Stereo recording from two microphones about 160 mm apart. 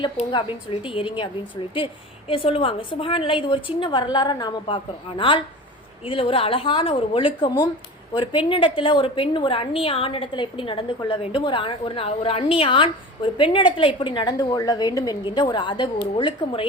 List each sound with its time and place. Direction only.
0.3 s a woman's voice: 30° left (ahead or behind)